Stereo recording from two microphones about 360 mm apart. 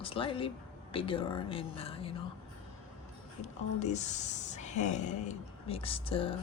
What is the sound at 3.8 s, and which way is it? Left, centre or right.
Speech, centre.